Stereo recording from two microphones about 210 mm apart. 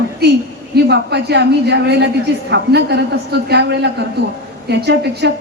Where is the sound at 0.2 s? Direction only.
50° right (ahead or behind).